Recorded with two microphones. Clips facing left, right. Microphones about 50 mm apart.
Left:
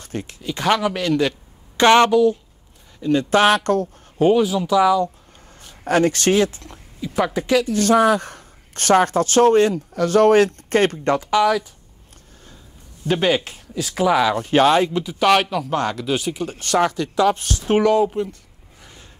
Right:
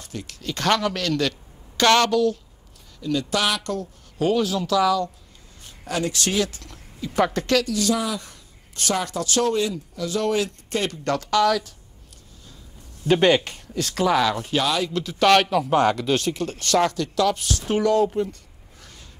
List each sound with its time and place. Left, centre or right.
0.0 s a sound: left
0.3 s speech: centre
3.0 s speech: left
4.2 s speech: centre
5.9 s speech: left
7.0 s speech: centre
7.7 s a woman's voice: left
11.1 s speech: centre
13.0 s speech: centre
14.3 s speech: left
14.9 s speech: centre
18.1 s a sound: centre